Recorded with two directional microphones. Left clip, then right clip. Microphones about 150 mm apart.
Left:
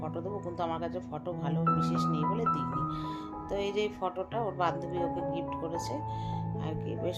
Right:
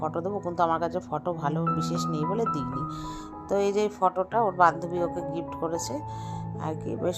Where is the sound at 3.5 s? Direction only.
50° right (ahead or behind).